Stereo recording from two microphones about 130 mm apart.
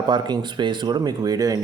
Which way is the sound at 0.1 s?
35° right (ahead or behind).